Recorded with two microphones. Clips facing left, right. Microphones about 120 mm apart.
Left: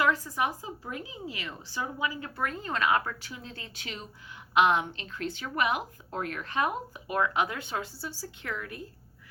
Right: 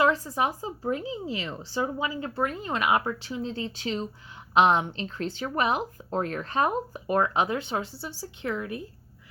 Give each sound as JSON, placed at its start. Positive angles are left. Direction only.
{"t": 0.0, "sound": "a woman's voice", "side_deg": -25}
{"t": 7.4, "sound": "speech", "side_deg": -25}